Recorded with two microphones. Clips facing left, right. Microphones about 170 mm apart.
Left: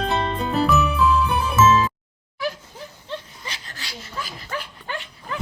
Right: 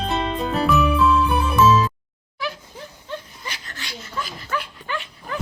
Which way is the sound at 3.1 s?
30° left (ahead or behind).